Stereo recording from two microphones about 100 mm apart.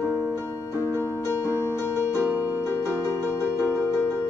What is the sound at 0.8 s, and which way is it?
Music, 25° left (ahead or behind).